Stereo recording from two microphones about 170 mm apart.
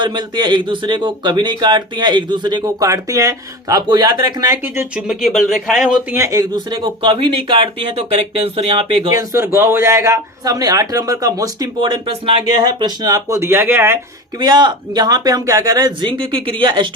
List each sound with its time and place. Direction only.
0.0 s a man's voice: 25° right (ahead or behind)
4.6 s speech: 10° right (ahead or behind)
5.0 s speech: centre (ahead or behind)
6.1 s a man's voice: 15° right (ahead or behind)
9.1 s a man's voice: 15° right (ahead or behind)
14.3 s a man's voice: 25° right (ahead or behind)